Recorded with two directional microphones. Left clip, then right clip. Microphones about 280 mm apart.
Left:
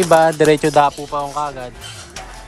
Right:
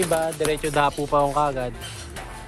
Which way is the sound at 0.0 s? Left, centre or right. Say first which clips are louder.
Left 11 dB; left.